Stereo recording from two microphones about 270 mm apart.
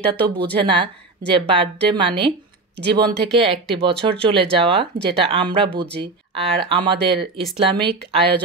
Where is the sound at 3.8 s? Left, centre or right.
Centre.